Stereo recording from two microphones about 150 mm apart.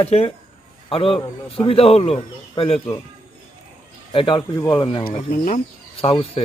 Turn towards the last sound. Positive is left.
turn(degrees=40)  # may be behind; listen again after turning